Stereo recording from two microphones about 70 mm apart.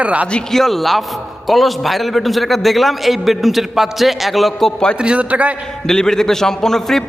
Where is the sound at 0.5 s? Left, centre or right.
Centre.